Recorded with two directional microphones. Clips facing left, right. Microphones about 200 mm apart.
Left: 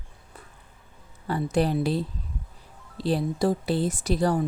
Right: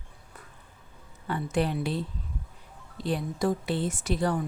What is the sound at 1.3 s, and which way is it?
A woman's voice, 35° left (ahead or behind).